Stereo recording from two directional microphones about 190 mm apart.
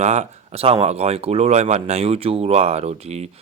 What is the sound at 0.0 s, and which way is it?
Speech, 35° right (ahead or behind).